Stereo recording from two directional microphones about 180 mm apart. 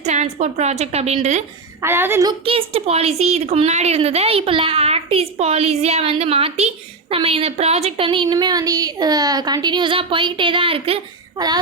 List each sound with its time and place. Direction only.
0.0 s a woman's voice: 40° right (ahead or behind)
1.8 s a woman's voice: 15° right (ahead or behind)
2.4 s speech: 30° right (ahead or behind)